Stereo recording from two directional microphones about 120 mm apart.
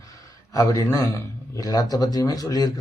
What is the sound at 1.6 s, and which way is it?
Speech, 30° left (ahead or behind).